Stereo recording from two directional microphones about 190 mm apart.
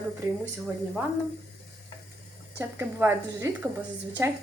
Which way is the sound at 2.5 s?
10° right (ahead or behind).